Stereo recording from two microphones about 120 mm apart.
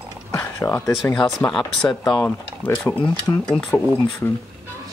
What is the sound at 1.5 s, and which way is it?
Speech, 5° left (ahead or behind).